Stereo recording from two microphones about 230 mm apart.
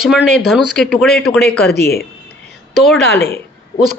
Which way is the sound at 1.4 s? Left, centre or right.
Left.